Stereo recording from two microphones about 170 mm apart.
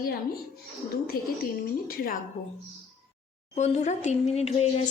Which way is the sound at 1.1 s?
60° left (ahead or behind).